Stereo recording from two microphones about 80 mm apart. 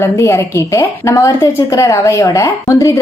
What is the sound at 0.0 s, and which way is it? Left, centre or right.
A woman's voice, left.